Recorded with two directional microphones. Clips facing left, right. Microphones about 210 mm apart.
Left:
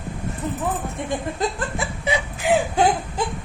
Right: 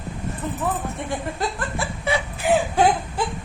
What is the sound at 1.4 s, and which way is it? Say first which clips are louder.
Laughter: left 2 dB; 15° left (ahead or behind).